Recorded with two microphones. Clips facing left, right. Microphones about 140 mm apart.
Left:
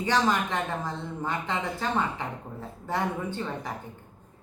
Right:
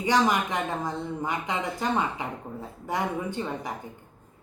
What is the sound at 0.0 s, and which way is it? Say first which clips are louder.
Speech: right 2 dB; 15° right (ahead or behind).